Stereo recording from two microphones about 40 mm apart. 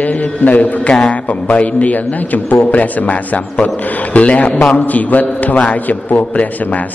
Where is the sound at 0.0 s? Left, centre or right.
Left.